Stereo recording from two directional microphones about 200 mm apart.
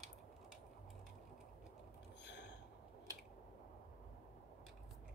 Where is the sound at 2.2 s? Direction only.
60° left (ahead or behind).